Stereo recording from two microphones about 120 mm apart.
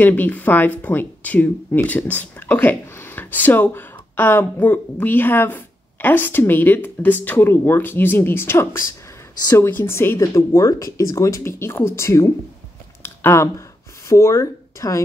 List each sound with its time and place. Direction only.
0.0 s speech: 15° left (ahead or behind)
13.0 s a sound: 20° left (ahead or behind)
14.0 s speech: 25° left (ahead or behind)